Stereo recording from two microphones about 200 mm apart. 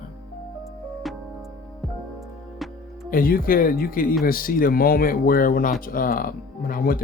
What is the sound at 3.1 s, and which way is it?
Speech, 45° left (ahead or behind).